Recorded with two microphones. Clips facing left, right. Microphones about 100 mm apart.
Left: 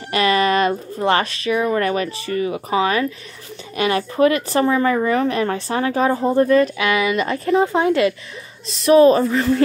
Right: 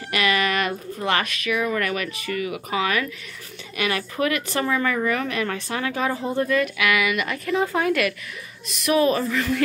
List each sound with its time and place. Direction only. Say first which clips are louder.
0.1 s a woman's voice: left 6 dB; 35° left (ahead or behind)